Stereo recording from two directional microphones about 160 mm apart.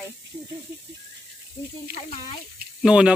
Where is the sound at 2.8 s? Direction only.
5° right (ahead or behind).